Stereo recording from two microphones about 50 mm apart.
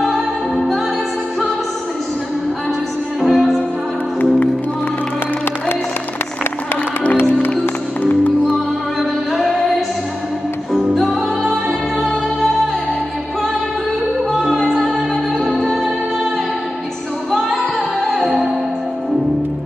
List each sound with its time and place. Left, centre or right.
0.0 s music: centre
3.2 s music: centre
8.0 s music: left
9.4 s music: centre
14.4 s music: centre
17.3 s music: centre